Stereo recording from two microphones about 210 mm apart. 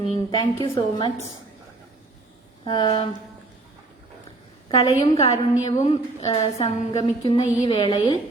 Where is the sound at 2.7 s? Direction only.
20° left (ahead or behind).